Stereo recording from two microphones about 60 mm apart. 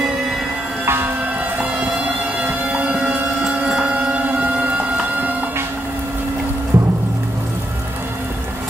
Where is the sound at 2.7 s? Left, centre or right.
Right.